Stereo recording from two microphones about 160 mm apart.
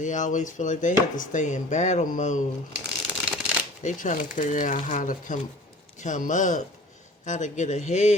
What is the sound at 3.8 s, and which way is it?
Speech, 50° left (ahead or behind).